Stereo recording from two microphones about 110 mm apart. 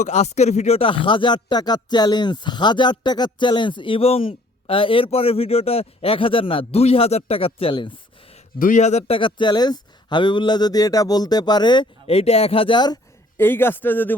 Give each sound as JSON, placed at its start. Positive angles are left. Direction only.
{"t": 0.1, "sound": "speech", "side_deg": 90}
{"t": 0.9, "sound": "speech", "side_deg": 50}
{"t": 8.3, "sound": "a man's voice", "side_deg": 90}
{"t": 9.1, "sound": "speech", "side_deg": 45}
{"t": 12.0, "sound": "speech", "side_deg": 65}
{"t": 13.3, "sound": "speech", "side_deg": 20}